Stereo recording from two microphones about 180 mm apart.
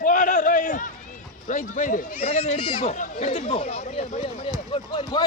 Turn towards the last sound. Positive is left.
turn(degrees=25)  # may be behind; listen again after turning